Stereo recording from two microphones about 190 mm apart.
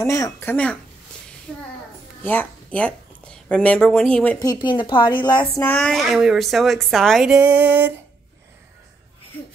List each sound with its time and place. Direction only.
0.0 s a woman's voice: 15° left (ahead or behind)
4.4 s speech: 20° left (ahead or behind)
5.6 s a woman's voice: 5° left (ahead or behind); by 7.9 s 10° right (ahead or behind)